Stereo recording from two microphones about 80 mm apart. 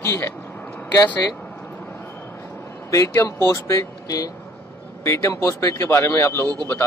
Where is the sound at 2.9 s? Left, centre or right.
Left.